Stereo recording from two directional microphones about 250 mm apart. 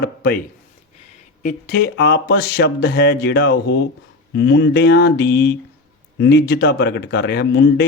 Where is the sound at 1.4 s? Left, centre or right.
Left.